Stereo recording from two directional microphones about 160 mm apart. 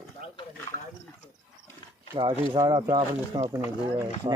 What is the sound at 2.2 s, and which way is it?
Speech, 30° right (ahead or behind).